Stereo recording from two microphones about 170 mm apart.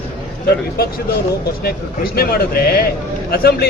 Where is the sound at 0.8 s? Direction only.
65° left (ahead or behind).